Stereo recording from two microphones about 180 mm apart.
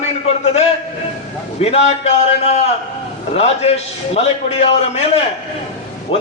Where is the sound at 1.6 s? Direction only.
35° left (ahead or behind).